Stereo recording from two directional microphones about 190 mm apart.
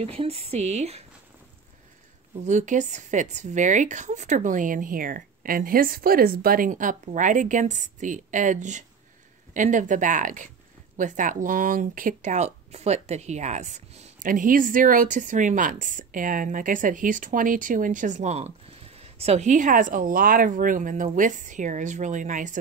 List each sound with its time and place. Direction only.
0.0 s a woman's voice: 30° right (ahead or behind)
2.4 s a woman's voice: 40° right (ahead or behind)